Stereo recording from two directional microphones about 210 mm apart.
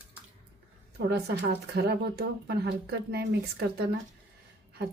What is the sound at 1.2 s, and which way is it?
Speech, 50° right (ahead or behind).